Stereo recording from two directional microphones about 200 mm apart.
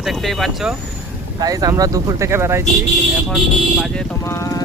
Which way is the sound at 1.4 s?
20° right (ahead or behind).